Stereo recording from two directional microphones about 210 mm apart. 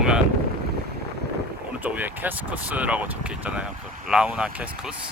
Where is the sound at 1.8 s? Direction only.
10° right (ahead or behind).